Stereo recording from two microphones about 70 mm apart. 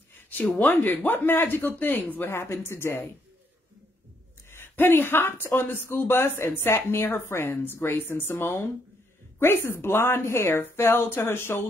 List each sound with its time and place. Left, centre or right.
0.6 s speech: left
4.5 s speech: left